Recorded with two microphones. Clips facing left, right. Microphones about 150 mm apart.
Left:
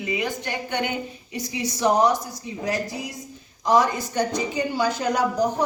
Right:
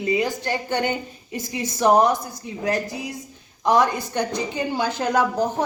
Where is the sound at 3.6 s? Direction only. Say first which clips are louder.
Right 1 dB; 55° right (ahead or behind).